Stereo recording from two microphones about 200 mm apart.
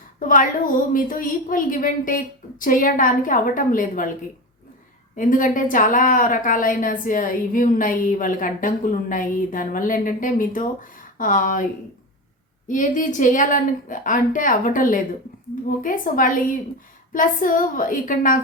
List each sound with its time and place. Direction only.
0.2 s a woman's voice: 40° left (ahead or behind)
5.1 s a woman's voice: 40° left (ahead or behind)
12.6 s a woman's voice: 40° left (ahead or behind)